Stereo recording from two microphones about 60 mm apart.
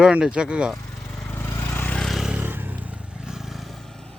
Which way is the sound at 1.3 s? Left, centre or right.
Left.